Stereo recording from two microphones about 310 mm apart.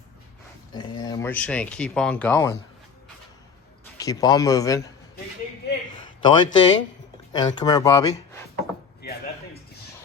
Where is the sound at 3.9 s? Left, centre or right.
Centre.